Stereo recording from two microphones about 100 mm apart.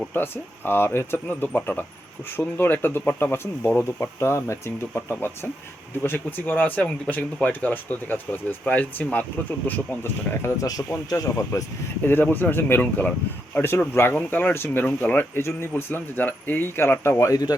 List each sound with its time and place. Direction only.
0.1 s speech: 20° left (ahead or behind)
10.7 s speech: 40° left (ahead or behind)
12.0 s speech: 20° left (ahead or behind); by 17.5 s 35° left (ahead or behind)